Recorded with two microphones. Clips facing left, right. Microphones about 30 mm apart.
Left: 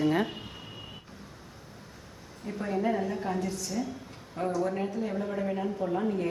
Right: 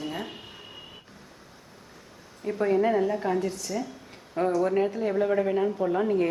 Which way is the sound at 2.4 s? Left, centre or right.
Right.